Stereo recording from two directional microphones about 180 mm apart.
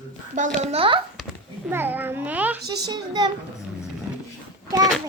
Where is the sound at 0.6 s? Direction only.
35° right (ahead or behind).